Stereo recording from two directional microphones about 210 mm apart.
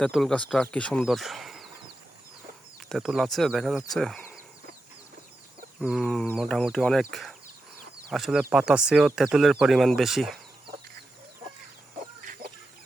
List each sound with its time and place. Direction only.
0.0 s speech: centre (ahead or behind)
2.9 s speech: centre (ahead or behind)
5.8 s speech: centre (ahead or behind)
12.2 s chicken: 40° right (ahead or behind)